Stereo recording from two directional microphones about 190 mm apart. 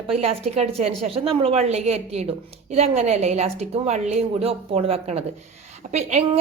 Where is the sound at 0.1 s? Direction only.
30° right (ahead or behind).